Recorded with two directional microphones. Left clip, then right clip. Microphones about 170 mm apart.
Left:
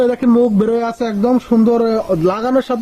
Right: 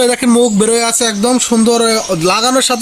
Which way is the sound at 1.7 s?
15° right (ahead or behind).